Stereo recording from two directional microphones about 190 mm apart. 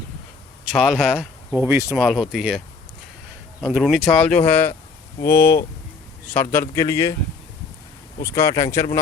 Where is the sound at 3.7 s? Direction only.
Centre (ahead or behind).